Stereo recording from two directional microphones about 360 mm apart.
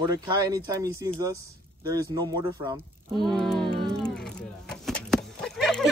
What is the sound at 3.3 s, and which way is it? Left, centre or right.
Speech, centre.